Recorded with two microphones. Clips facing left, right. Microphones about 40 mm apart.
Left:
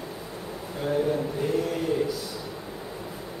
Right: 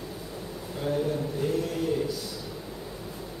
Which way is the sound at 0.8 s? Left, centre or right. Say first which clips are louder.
Left 3 dB; centre.